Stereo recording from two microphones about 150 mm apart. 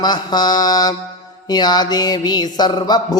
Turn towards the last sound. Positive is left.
turn(degrees=25)  # may be behind; listen again after turning